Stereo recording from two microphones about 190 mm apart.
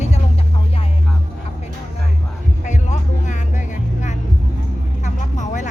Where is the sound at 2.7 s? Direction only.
40° left (ahead or behind).